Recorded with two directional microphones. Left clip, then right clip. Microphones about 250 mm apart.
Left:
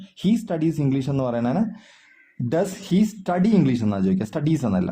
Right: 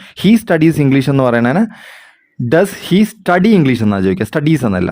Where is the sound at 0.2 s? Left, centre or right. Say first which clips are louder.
Right 12 dB; right.